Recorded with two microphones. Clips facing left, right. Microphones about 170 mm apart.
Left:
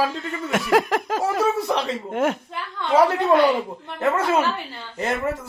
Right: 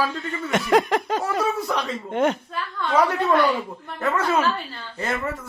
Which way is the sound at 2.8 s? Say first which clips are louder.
Left 3 dB; 20° left (ahead or behind).